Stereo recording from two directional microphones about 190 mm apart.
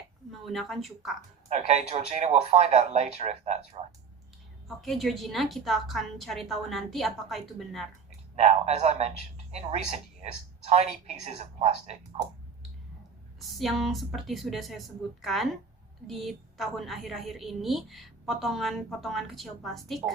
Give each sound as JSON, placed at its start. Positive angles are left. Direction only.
{"t": 0.3, "sound": "a woman's voice", "side_deg": 0}
{"t": 1.5, "sound": "speech", "side_deg": -35}
{"t": 4.8, "sound": "a woman's voice", "side_deg": 0}
{"t": 8.4, "sound": "speech", "side_deg": -35}
{"t": 13.6, "sound": "a woman's voice", "side_deg": 0}